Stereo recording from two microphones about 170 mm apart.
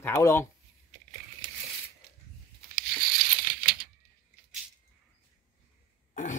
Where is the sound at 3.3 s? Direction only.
60° right (ahead or behind).